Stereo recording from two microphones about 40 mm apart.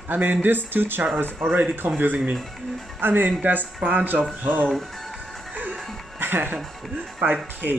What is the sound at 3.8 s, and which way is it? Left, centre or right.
Speech, right.